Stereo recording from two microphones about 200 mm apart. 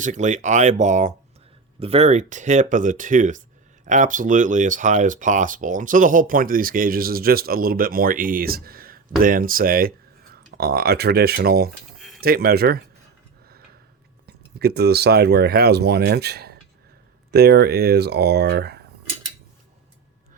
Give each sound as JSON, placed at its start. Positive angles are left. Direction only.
{"t": 0.0, "sound": "speech", "side_deg": -35}
{"t": 11.9, "sound": "tick-tock", "side_deg": 0}
{"t": 12.2, "sound": "speech", "side_deg": -50}
{"t": 14.3, "sound": "speech", "side_deg": -50}